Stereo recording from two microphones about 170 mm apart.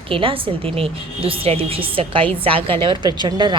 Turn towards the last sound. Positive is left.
turn(degrees=-25)  # may be behind; listen again after turning